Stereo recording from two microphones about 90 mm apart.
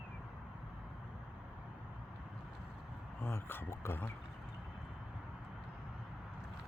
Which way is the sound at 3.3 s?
30° left (ahead or behind).